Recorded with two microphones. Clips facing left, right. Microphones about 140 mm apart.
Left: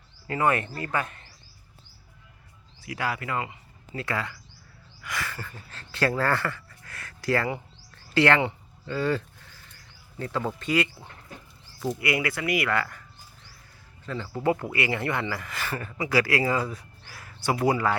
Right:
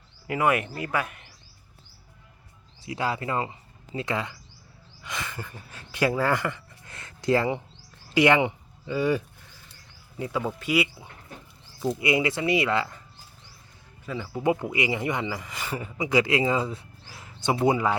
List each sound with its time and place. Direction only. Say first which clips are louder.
0.3 s speech: right 1 dB; 10° right (ahead or behind)
2.8 s speech: right 2 dB; 25° right (ahead or behind)
11.8 s speech: right 3 dB; 20° right (ahead or behind)
14.0 s speech: right 1 dB; 10° right (ahead or behind)